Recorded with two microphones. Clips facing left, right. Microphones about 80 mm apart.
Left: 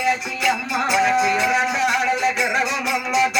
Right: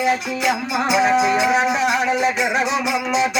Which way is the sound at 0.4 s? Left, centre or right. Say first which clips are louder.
Even; centre.